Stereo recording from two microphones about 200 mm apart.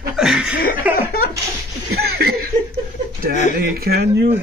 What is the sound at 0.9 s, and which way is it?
Snicker, 50° left (ahead or behind).